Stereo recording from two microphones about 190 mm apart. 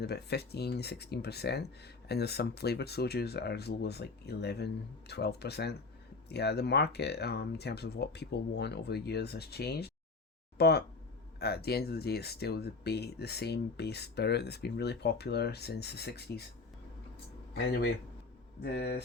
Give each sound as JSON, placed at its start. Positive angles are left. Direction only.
{"t": 0.0, "sound": "speech", "side_deg": 60}
{"t": 18.6, "sound": "speech", "side_deg": 60}